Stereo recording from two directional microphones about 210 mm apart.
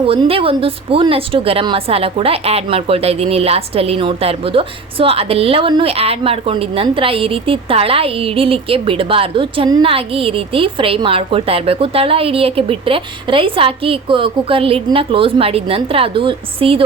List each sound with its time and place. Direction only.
0.0 s speech: 25° right (ahead or behind)